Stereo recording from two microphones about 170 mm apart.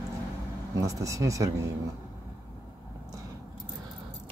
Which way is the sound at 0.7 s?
20° right (ahead or behind).